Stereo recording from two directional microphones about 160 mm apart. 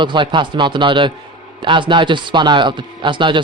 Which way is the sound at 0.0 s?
30° right (ahead or behind).